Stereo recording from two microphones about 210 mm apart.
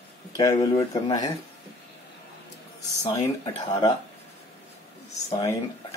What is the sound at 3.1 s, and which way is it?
Speech, 15° left (ahead or behind).